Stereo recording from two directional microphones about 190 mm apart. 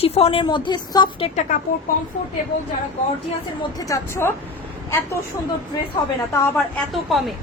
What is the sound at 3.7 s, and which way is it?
Speech, 15° left (ahead or behind).